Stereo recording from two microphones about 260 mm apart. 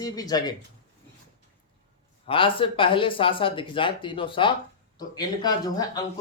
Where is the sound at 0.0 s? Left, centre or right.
Centre.